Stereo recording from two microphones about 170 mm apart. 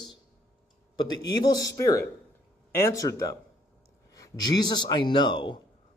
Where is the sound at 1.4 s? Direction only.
20° left (ahead or behind).